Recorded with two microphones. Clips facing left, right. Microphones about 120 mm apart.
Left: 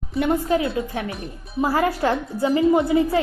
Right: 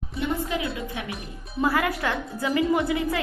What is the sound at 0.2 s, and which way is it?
Speech, 45° left (ahead or behind).